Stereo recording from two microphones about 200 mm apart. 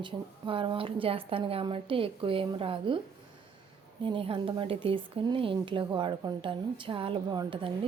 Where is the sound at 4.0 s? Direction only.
25° right (ahead or behind).